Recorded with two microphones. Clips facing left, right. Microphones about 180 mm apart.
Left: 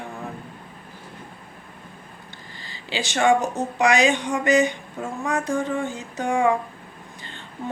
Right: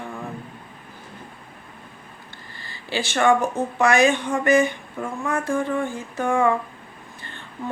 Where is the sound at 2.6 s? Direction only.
15° left (ahead or behind).